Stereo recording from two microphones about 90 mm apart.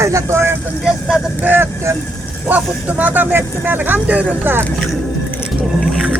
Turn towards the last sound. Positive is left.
turn(degrees=-25)  # may be behind; listen again after turning